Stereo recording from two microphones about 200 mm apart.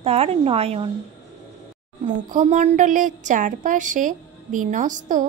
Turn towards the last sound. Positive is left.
turn(degrees=-40)  # may be behind; listen again after turning